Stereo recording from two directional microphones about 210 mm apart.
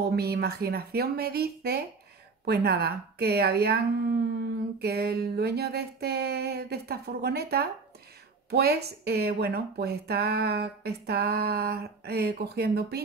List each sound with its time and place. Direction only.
0.1 s speech: 50° right (ahead or behind)